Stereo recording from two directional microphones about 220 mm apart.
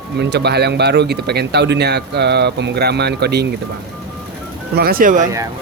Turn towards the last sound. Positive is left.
turn(degrees=-40)  # may be behind; listen again after turning